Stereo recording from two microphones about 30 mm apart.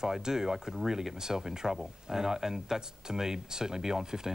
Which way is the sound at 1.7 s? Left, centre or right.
Centre.